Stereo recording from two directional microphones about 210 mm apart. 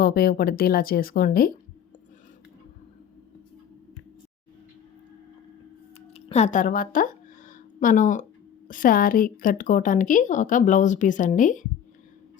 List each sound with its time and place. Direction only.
0.0 s speech: 45° left (ahead or behind)
6.1 s a woman's voice: 30° left (ahead or behind)